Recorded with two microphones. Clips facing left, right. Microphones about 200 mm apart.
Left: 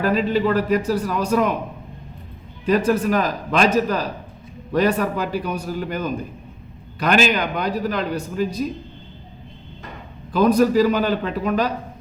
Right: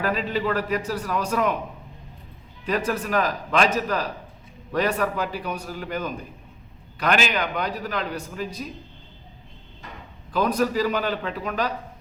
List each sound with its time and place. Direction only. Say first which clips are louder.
0.0 s a man's voice: left 6 dB; 35° left (ahead or behind)
2.6 s a man's voice: left 7 dB; 35° left (ahead or behind)
10.3 s a man's voice: left 7 dB; 40° left (ahead or behind)